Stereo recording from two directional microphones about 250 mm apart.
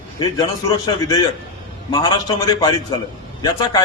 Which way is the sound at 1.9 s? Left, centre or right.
Centre.